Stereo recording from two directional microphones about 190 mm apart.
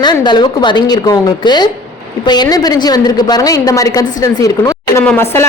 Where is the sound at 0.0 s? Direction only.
20° left (ahead or behind).